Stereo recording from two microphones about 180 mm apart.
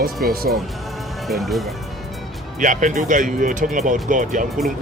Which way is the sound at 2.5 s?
45° right (ahead or behind).